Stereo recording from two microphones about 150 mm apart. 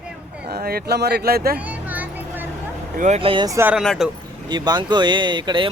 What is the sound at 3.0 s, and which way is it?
Speech, 45° right (ahead or behind).